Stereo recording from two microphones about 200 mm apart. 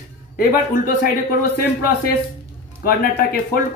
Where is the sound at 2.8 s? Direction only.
45° left (ahead or behind).